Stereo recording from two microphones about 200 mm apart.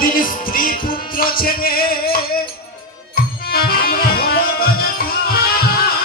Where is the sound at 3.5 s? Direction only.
50° left (ahead or behind).